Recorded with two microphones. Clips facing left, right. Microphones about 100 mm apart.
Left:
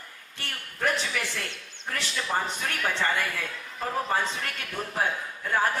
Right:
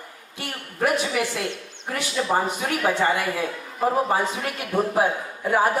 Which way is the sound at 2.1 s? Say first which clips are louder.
Right 7 dB; 30° right (ahead or behind).